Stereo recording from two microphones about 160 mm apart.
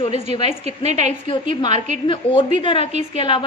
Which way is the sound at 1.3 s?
30° left (ahead or behind).